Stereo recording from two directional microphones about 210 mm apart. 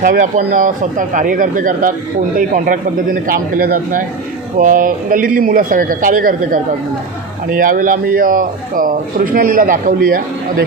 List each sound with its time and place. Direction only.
0.0 s a man's voice: 40° right (ahead or behind)